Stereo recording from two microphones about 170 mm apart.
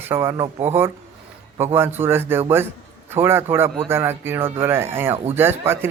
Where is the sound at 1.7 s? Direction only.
15° right (ahead or behind).